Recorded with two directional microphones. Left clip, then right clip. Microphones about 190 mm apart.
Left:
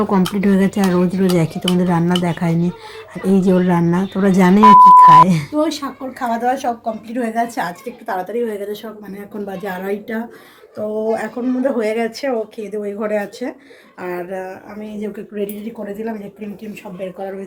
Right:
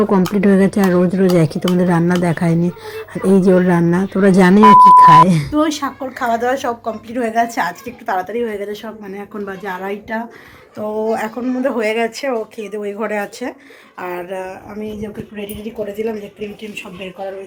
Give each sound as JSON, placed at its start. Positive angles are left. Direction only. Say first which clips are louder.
{"t": 0.0, "sound": "speech", "louder": "right 3 dB", "side_deg": -15}
{"t": 4.6, "sound": "a woman's voice", "louder": "even", "side_deg": 0}
{"t": 10.8, "sound": "a woman's voice", "louder": "right 1 dB", "side_deg": 0}